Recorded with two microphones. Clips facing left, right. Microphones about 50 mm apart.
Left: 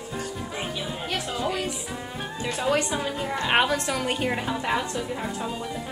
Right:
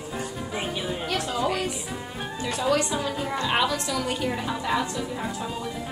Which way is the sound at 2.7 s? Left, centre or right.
Left.